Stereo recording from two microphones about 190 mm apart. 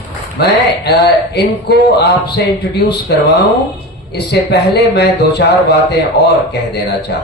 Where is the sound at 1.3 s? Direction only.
60° left (ahead or behind).